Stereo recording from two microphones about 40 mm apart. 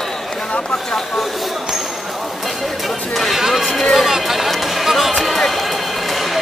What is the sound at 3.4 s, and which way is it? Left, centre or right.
Music, centre.